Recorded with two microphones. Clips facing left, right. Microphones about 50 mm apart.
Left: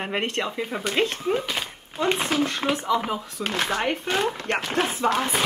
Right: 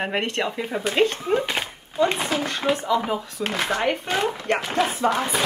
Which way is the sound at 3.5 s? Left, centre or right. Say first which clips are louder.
Right 1 dB; right.